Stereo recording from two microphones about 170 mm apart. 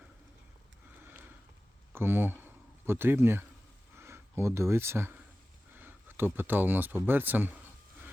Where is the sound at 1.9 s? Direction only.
15° right (ahead or behind).